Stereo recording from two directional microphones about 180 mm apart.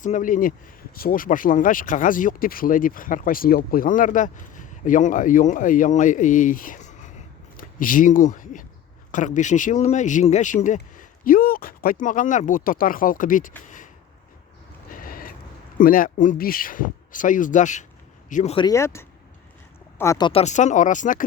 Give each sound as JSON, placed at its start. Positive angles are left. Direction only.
{"t": 0.0, "sound": "speech", "side_deg": 45}
{"t": 14.8, "sound": "a sound", "side_deg": 50}
{"t": 15.8, "sound": "speech", "side_deg": 50}
{"t": 18.5, "sound": "speech", "side_deg": 20}
{"t": 20.4, "sound": "speech", "side_deg": 40}